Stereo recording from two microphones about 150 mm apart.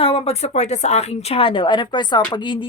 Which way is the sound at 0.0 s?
40° left (ahead or behind).